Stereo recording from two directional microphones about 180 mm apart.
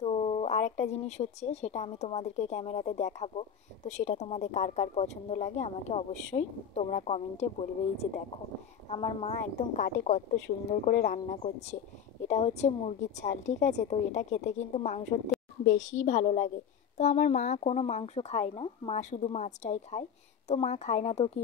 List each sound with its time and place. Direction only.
0.0 s speech: 35° left (ahead or behind)
9.8 s a woman's voice: 45° left (ahead or behind)
10.7 s speech: 55° left (ahead or behind)
11.2 s speech: 40° left (ahead or behind)